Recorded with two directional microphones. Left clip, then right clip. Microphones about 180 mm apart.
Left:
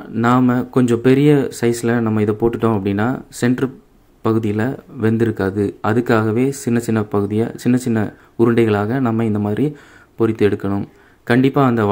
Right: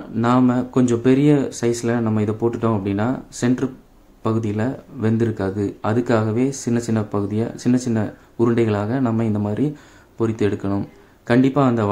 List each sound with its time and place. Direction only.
0.1 s speech: 20° left (ahead or behind)